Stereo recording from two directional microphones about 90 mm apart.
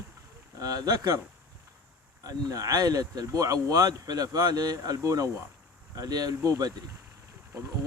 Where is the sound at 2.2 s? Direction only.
40° right (ahead or behind).